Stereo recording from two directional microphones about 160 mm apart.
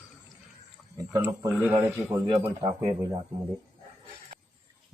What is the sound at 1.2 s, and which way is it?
A man's voice, 15° right (ahead or behind).